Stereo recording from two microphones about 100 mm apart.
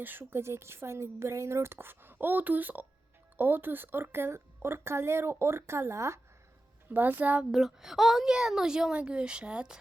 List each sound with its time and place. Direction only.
0.0 s a woman's voice: 20° right (ahead or behind)
6.9 s a woman's voice: 15° right (ahead or behind)
7.5 s a woman's voice: 5° right (ahead or behind)